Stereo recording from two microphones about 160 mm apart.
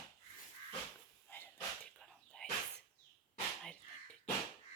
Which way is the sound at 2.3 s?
5° left (ahead or behind).